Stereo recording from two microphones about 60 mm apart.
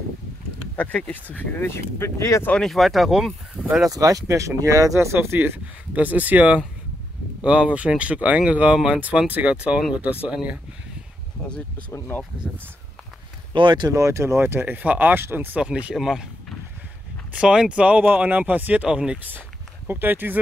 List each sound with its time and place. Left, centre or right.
0.7 s speech: left
1.3 s speech: left
2.5 s speech: centre
3.6 s speech: left
3.9 s speech: right
4.9 s speech: right
5.9 s speech: right
12.4 s speech: centre
13.9 s speech: right
14.4 s speech: right
15.6 s speech: centre
17.3 s speech: centre
19.9 s speech: right